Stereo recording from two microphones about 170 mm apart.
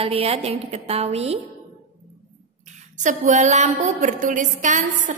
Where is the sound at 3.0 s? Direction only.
45° right (ahead or behind).